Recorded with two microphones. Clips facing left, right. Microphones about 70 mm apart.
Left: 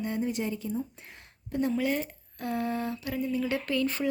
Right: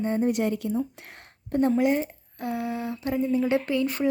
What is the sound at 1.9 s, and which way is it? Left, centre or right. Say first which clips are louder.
Speech: right 5 dB; right.